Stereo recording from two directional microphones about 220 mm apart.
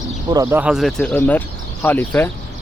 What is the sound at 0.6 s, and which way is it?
Speech, centre (ahead or behind).